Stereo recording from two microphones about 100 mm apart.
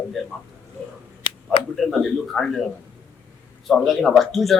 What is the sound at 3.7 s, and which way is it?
Speech, 5° left (ahead or behind).